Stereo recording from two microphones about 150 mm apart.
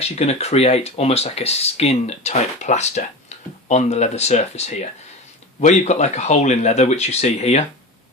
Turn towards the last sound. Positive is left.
turn(degrees=45)  # may be behind; listen again after turning